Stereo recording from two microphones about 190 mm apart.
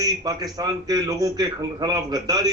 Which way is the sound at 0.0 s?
20° right (ahead or behind).